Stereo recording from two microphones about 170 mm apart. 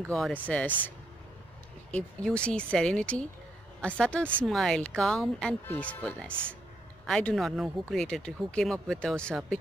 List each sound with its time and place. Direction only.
0.1 s speech: 5° left (ahead or behind)